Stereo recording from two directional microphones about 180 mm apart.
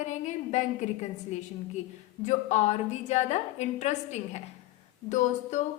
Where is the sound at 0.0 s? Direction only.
40° left (ahead or behind).